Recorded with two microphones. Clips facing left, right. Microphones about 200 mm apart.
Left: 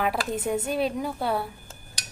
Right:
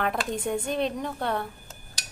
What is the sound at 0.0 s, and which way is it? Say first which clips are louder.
A woman's voice: left 1 dB; 5° left (ahead or behind).